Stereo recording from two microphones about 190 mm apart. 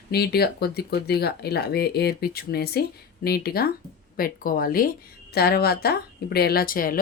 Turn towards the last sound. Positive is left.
turn(degrees=50)  # may be behind; listen again after turning